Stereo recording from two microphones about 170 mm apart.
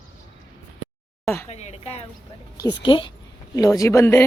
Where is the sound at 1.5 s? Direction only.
40° left (ahead or behind).